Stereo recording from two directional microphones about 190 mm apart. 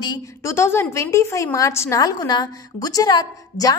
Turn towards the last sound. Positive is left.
turn(degrees=20)  # may be behind; listen again after turning